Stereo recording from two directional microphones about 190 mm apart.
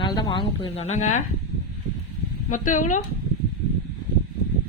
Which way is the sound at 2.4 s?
45° left (ahead or behind).